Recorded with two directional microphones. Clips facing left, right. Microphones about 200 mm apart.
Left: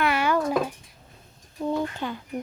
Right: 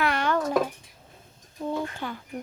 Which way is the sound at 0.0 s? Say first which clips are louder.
Left 2 dB; 5° left (ahead or behind).